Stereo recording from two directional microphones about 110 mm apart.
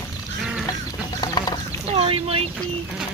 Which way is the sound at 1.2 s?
40° left (ahead or behind).